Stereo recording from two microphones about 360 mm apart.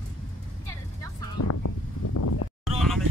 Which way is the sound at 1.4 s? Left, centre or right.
Left.